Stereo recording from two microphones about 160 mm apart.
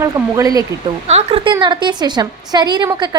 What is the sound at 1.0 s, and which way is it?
A woman's voice, 40° right (ahead or behind).